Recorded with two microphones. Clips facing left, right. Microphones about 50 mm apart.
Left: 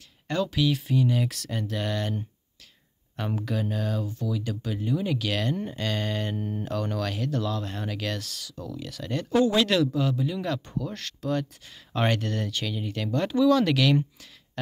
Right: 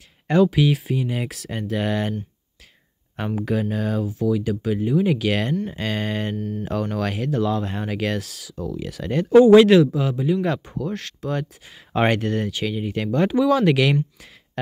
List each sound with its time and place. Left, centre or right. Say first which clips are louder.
0.3 s speech: right 8 dB; centre
3.3 s speech: right 7 dB; centre
6.3 s speech: right 4 dB; centre
6.6 s speech: right 5 dB; centre